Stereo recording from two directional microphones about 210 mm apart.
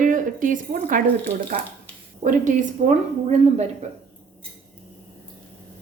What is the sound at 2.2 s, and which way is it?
A woman's voice, 35° right (ahead or behind).